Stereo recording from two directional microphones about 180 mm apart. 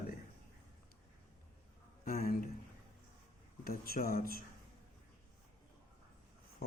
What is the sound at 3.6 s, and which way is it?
Speech, 55° left (ahead or behind).